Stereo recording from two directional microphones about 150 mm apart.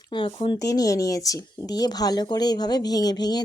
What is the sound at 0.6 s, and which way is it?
Speech, 20° left (ahead or behind).